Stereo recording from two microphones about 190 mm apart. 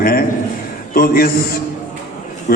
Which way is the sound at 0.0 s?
50° left (ahead or behind).